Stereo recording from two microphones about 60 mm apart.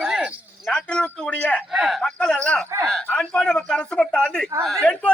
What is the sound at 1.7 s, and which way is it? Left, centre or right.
Speech, centre.